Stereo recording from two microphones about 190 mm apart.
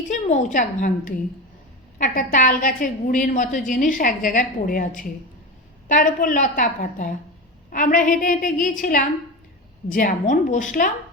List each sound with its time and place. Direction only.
0.1 s a woman's voice: 40° left (ahead or behind)